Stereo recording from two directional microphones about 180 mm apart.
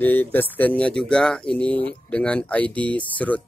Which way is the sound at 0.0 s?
10° left (ahead or behind).